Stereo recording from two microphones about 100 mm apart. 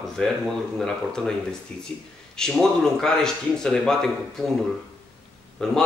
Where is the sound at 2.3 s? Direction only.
5° left (ahead or behind).